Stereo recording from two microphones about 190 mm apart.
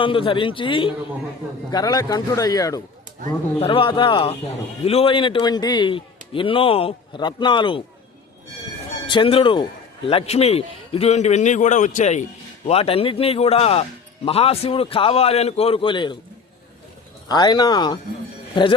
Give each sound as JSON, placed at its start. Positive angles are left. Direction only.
{"t": 0.0, "sound": "a man's voice", "side_deg": 25}
{"t": 9.0, "sound": "a man's voice", "side_deg": 25}
{"t": 17.2, "sound": "a man's voice", "side_deg": 20}